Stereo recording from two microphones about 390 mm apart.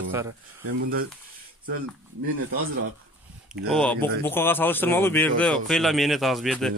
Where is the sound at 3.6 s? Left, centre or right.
Centre.